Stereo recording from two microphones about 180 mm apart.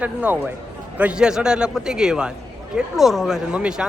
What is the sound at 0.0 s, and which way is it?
A man's voice, 10° right (ahead or behind).